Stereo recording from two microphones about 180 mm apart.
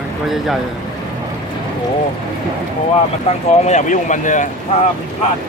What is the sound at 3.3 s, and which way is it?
Speech, 35° left (ahead or behind).